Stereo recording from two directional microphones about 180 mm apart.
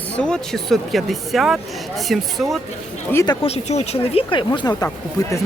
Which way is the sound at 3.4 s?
35° left (ahead or behind).